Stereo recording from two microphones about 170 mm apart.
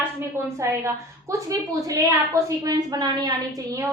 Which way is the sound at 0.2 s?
15° right (ahead or behind).